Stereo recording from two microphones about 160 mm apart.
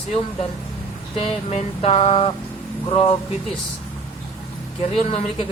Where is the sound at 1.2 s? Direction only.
40° left (ahead or behind).